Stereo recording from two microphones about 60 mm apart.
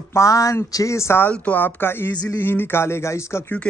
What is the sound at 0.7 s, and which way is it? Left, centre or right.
Speech, left.